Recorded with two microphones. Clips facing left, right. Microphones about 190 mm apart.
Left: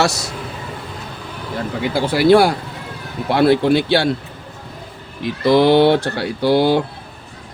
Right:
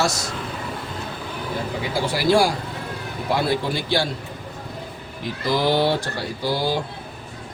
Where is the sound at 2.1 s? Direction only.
60° left (ahead or behind).